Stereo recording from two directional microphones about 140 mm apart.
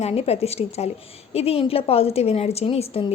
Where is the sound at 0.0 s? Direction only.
45° left (ahead or behind).